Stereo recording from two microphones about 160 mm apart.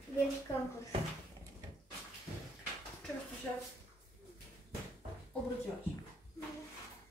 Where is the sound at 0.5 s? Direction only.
25° left (ahead or behind).